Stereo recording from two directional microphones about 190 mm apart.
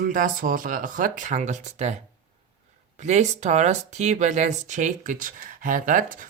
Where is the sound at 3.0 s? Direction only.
40° right (ahead or behind).